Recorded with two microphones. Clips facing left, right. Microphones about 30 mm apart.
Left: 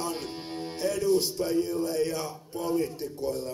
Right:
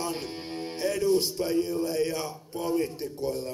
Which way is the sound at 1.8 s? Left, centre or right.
Right.